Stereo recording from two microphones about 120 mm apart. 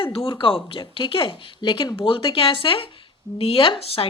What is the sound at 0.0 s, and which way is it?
A woman's voice, 50° left (ahead or behind).